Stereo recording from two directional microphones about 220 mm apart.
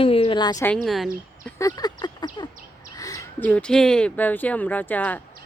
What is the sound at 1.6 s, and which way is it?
Speech, 15° left (ahead or behind).